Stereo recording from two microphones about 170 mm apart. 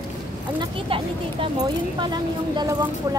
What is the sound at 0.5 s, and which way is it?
Speech, 30° right (ahead or behind).